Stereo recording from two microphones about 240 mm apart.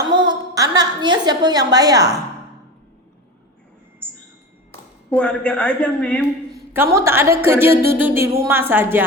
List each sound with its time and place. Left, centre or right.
0.1 s a sound: centre
4.7 s speech: centre
6.7 s a woman's voice: centre